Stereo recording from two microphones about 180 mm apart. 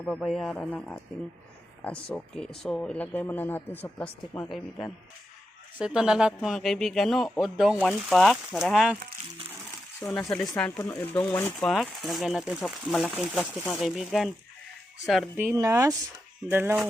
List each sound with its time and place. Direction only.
0.0 s a man's voice: centre (ahead or behind)
10.0 s a man's voice: 5° left (ahead or behind)
11.7 s a man's voice: centre (ahead or behind)
15.4 s speech: 15° right (ahead or behind)